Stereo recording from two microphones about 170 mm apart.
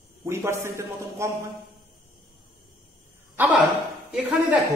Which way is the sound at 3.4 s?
10° right (ahead or behind).